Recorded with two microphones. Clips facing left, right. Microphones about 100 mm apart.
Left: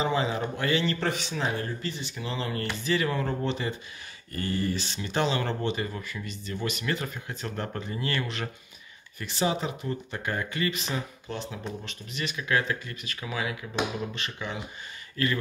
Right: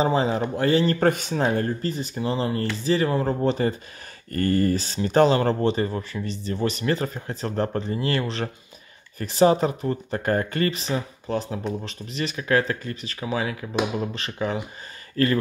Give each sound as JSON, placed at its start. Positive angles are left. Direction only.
{"t": 0.0, "sound": "speech", "side_deg": -35}
{"t": 4.3, "sound": "speech", "side_deg": -50}